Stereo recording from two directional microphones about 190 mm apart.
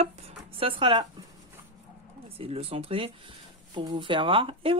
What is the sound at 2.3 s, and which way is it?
Speech, 30° right (ahead or behind).